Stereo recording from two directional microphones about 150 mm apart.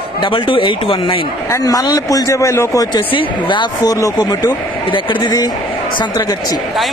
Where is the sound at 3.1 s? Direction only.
30° left (ahead or behind).